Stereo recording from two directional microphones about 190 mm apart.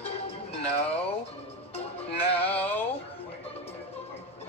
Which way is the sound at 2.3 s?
10° left (ahead or behind).